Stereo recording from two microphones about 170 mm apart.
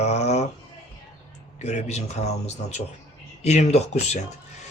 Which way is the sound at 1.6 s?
40° left (ahead or behind).